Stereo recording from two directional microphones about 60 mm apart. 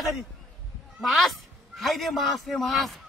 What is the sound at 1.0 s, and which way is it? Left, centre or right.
A man's voice, centre.